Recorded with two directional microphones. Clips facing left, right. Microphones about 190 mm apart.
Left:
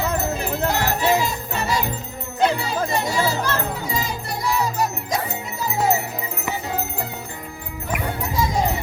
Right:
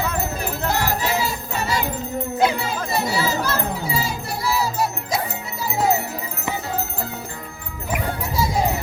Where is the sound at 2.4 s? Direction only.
5° right (ahead or behind).